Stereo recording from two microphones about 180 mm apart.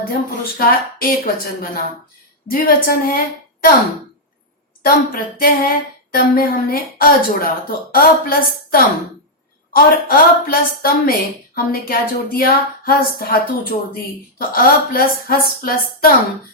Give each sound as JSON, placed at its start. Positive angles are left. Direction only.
{"t": 0.0, "sound": "speech", "side_deg": 55}
{"t": 4.8, "sound": "a woman's voice", "side_deg": 55}